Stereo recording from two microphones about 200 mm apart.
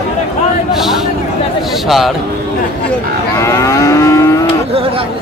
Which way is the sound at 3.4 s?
15° left (ahead or behind).